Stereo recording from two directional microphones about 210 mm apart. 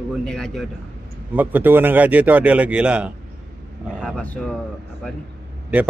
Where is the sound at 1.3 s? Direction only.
10° right (ahead or behind).